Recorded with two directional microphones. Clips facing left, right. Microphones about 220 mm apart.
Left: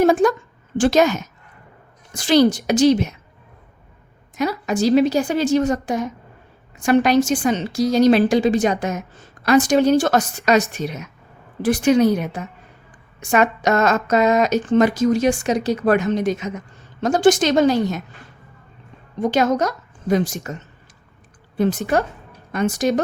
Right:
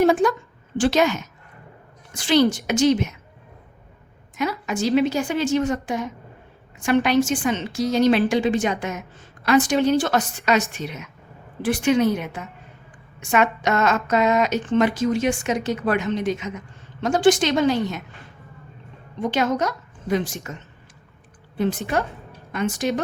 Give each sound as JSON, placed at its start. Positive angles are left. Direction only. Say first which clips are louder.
{"t": 0.0, "sound": "a woman's voice", "louder": "left 2 dB", "side_deg": 45}
{"t": 4.4, "sound": "a woman's voice", "louder": "left 4 dB", "side_deg": 35}
{"t": 19.2, "sound": "a woman's voice", "louder": "left 4 dB", "side_deg": 40}
{"t": 21.6, "sound": "a woman's voice", "louder": "left 4 dB", "side_deg": 40}